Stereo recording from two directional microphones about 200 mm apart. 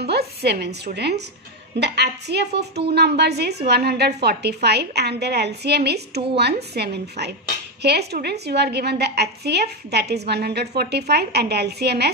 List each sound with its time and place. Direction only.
0.0 s a woman's voice: 55° right (ahead or behind)